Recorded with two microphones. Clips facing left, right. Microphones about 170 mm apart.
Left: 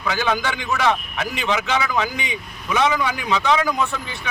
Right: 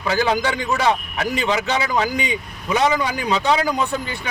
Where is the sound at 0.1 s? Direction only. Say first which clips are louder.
Right 3 dB; 35° right (ahead or behind).